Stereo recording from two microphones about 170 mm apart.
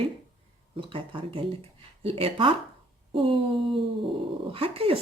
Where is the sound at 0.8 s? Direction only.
30° right (ahead or behind).